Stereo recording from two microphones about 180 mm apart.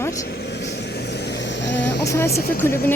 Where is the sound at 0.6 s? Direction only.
70° left (ahead or behind).